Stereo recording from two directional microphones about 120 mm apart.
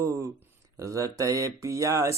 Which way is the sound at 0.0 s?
25° right (ahead or behind).